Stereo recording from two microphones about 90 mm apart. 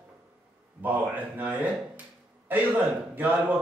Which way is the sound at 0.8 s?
20° right (ahead or behind).